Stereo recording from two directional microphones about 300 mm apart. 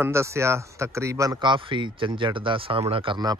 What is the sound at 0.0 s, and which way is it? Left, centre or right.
Speech, centre.